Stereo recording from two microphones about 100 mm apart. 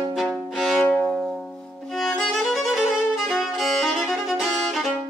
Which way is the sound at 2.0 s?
Centre (ahead or behind).